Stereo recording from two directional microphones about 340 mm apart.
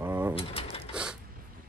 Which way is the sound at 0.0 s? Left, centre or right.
Centre.